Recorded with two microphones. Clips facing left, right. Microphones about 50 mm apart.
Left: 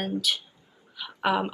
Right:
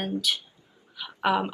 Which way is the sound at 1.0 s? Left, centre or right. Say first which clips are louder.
Right 1 dB; centre.